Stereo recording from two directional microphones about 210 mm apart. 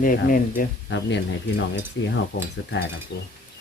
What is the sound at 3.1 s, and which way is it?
Speech, 50° left (ahead or behind).